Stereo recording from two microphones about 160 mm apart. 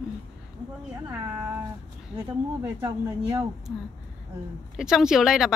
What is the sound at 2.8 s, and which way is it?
Speech, 15° right (ahead or behind).